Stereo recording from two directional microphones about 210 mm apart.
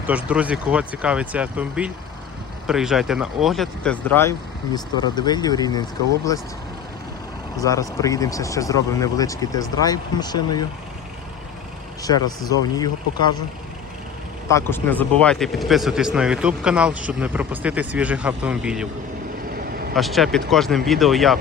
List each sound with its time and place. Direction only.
0.1 s speech: 5° right (ahead or behind); by 5.8 s 20° left (ahead or behind)
7.6 s speech: 15° left (ahead or behind)
12.0 s speech: 20° left (ahead or behind)
14.4 s speech: 10° left (ahead or behind); by 18.9 s 5° right (ahead or behind)
19.9 s speech: centre (ahead or behind)